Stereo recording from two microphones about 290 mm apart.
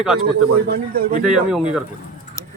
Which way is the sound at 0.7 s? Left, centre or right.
Right.